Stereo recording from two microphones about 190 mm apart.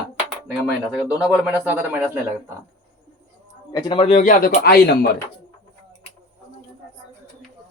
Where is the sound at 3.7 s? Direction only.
25° left (ahead or behind).